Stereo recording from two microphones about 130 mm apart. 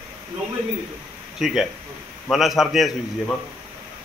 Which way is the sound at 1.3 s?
Centre (ahead or behind).